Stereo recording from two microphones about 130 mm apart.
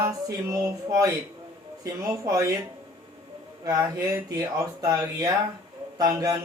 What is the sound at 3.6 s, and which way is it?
Speech, 25° right (ahead or behind).